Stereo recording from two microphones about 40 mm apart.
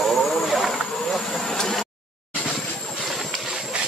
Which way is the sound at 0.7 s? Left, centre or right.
Centre.